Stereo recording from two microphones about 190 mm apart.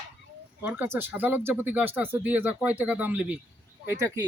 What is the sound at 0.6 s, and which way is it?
Speech, 10° right (ahead or behind).